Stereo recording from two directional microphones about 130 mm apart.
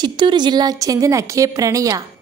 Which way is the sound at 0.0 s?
35° right (ahead or behind).